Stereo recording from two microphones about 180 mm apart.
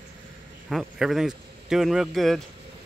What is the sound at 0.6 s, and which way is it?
A man's voice, centre (ahead or behind).